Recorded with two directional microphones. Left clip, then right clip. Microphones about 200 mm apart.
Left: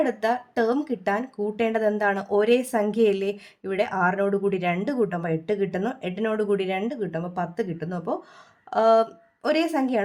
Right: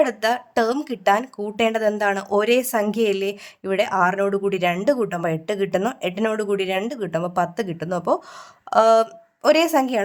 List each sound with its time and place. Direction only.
0.0 s speech: 35° right (ahead or behind)